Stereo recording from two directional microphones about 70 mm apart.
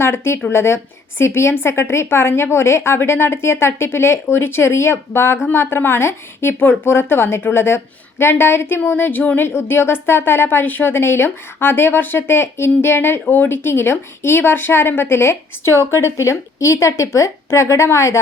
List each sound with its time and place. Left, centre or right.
0.0 s speech: left